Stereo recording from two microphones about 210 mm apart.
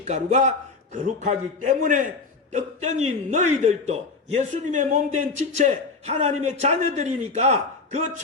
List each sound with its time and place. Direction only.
0.0 s a man's voice: 35° right (ahead or behind)